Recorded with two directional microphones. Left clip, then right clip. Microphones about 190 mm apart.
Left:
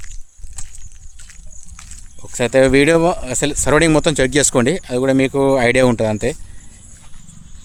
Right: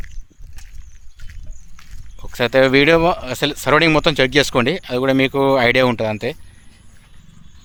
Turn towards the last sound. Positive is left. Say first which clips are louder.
# left 3 dB
turn(degrees=15)  # may be behind; listen again after turning